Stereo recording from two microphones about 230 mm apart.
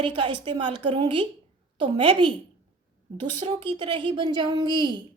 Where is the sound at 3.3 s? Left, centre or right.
Right.